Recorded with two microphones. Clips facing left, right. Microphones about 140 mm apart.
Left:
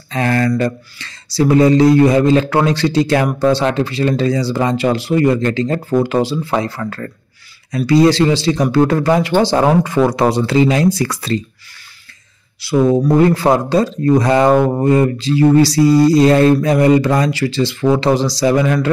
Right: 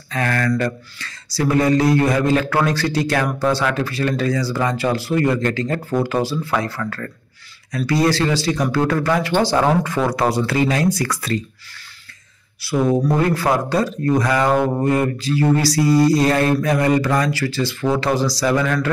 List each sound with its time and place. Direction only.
0.1 s speech: 25° left (ahead or behind)
12.6 s speech: 20° left (ahead or behind)